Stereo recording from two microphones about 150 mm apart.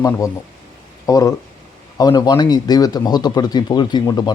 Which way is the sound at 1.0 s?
20° left (ahead or behind).